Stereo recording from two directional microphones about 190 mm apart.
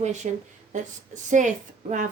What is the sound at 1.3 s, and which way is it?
Speech, 40° right (ahead or behind).